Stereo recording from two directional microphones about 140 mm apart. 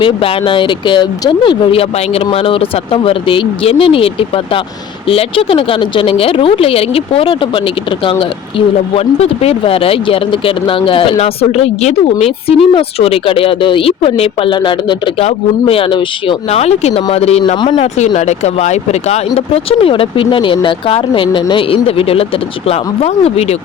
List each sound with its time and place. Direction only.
0.0 s speech: 40° left (ahead or behind)
16.5 s speech: 50° left (ahead or behind)